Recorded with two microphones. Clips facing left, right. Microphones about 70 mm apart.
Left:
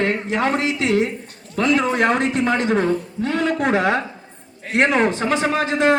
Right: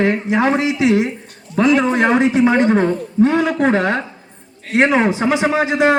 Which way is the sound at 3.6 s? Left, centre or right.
Centre.